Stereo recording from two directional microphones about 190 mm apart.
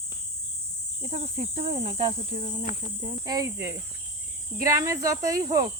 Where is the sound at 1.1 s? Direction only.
35° right (ahead or behind).